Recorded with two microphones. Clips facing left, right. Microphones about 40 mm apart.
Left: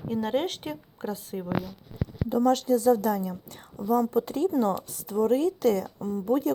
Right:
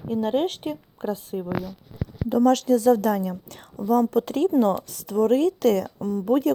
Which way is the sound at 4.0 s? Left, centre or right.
Right.